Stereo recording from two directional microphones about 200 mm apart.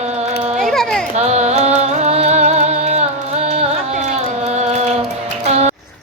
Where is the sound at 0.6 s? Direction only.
Centre (ahead or behind).